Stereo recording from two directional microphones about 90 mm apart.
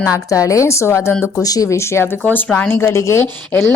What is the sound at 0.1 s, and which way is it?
A woman's voice, 40° left (ahead or behind).